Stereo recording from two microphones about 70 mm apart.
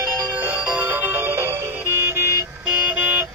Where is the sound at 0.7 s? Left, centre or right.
Right.